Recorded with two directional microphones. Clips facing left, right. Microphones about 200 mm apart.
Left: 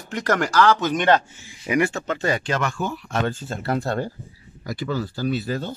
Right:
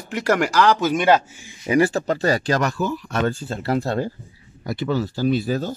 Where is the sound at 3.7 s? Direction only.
15° right (ahead or behind).